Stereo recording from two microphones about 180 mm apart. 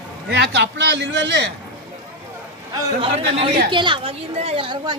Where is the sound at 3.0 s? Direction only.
30° right (ahead or behind).